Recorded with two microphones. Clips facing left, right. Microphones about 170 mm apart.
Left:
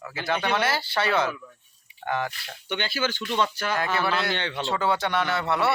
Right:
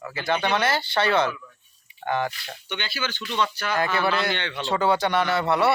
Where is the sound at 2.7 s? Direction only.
45° left (ahead or behind).